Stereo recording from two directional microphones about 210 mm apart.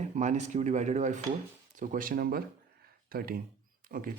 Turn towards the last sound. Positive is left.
turn(degrees=-40)  # may be behind; listen again after turning